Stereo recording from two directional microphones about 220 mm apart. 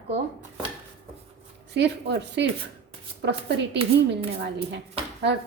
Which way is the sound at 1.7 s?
50° right (ahead or behind).